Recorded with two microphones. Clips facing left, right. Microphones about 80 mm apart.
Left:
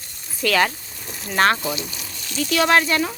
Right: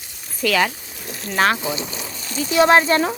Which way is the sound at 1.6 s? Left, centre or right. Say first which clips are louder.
Right 2 dB; right.